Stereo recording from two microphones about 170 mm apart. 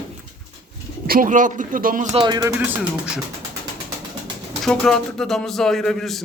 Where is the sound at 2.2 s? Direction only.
25° right (ahead or behind).